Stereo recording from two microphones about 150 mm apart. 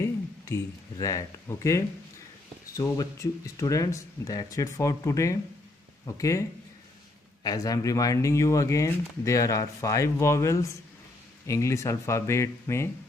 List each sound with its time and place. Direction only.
0.0 s speech: 20° left (ahead or behind)
7.4 s speech: 25° left (ahead or behind)